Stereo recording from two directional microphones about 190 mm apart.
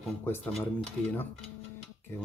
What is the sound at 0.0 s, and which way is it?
Speech, 5° left (ahead or behind).